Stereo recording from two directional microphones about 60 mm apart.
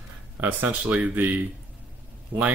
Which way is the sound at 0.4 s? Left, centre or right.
Right.